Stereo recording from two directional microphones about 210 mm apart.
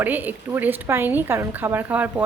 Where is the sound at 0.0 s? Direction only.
10° right (ahead or behind).